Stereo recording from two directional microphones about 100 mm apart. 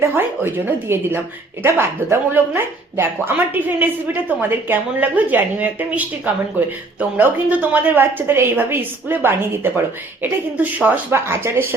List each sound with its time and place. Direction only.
0.1 s a woman's voice: 20° right (ahead or behind)